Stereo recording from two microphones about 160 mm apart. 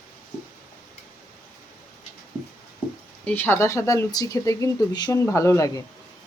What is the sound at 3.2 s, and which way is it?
Speech, 15° left (ahead or behind).